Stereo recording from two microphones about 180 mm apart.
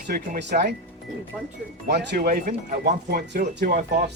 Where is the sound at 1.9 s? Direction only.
60° right (ahead or behind).